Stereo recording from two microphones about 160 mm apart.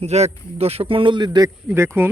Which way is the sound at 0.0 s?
40° right (ahead or behind).